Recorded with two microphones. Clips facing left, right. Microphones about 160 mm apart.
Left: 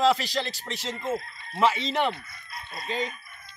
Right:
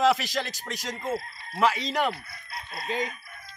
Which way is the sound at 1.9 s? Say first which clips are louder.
Left 1 dB; 10° right (ahead or behind).